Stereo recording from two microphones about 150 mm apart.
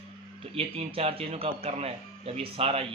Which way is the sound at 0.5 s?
40° right (ahead or behind).